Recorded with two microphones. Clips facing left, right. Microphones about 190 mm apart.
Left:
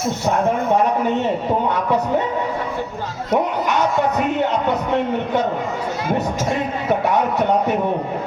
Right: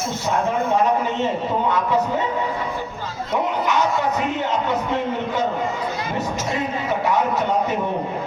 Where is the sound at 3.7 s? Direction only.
55° left (ahead or behind).